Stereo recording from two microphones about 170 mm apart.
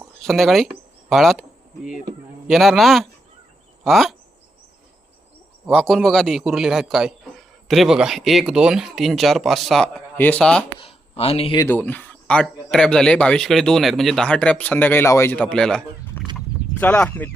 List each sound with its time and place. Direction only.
0.2 s a man's voice: centre (ahead or behind)
5.7 s a man's voice: centre (ahead or behind)
10.8 s speech: 35° left (ahead or behind)
11.6 s a man's voice: 10° left (ahead or behind)
16.2 s a sound: 10° left (ahead or behind)
16.8 s speech: 10° left (ahead or behind)